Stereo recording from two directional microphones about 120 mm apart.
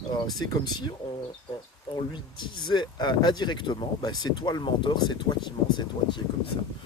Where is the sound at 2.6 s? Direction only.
40° left (ahead or behind).